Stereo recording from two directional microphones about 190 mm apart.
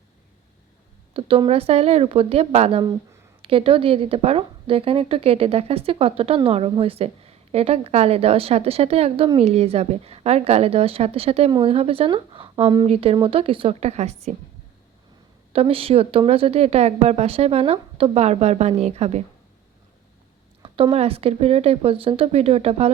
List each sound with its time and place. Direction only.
1.1 s a woman's voice: 30° right (ahead or behind)
15.5 s a woman's voice: 30° right (ahead or behind)
20.6 s a woman's voice: 30° right (ahead or behind)